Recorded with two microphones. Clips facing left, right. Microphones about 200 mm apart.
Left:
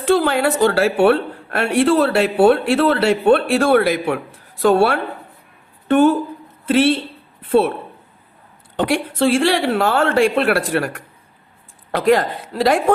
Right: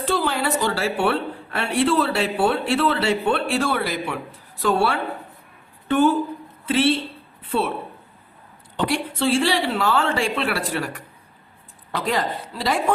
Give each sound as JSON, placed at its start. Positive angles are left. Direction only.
{"t": 0.0, "sound": "a man's voice", "side_deg": 60}
{"t": 8.7, "sound": "a man's voice", "side_deg": 50}